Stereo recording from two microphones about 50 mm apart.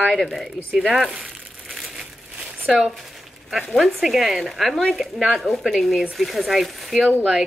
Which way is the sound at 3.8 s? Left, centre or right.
Centre.